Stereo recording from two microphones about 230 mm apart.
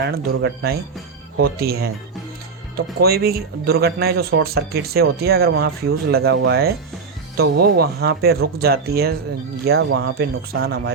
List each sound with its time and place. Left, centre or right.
0.0 s speech: right
3.0 s speech: right